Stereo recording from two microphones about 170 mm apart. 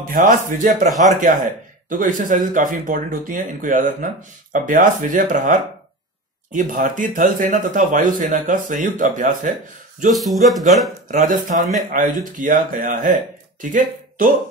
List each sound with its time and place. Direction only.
0.0 s speech: 50° right (ahead or behind)
10.1 s speech: centre (ahead or behind)
11.1 s speech: 50° right (ahead or behind)